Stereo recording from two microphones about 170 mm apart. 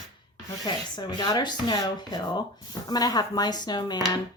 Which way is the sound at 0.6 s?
25° left (ahead or behind).